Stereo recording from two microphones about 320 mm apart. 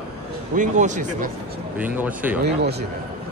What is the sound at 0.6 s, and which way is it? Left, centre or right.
Speech, right.